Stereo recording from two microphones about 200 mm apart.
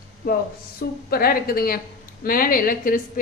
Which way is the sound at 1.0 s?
50° left (ahead or behind).